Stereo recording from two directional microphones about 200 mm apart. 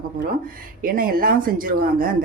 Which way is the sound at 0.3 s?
45° right (ahead or behind).